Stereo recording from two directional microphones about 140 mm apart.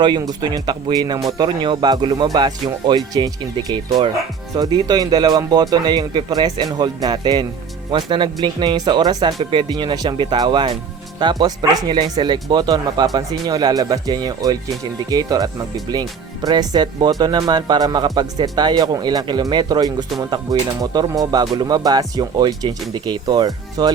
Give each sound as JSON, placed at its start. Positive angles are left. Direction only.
{"t": 0.0, "sound": "speech", "side_deg": -30}